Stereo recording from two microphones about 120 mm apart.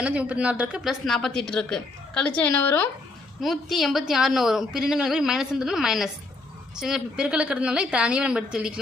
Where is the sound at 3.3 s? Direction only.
Centre (ahead or behind).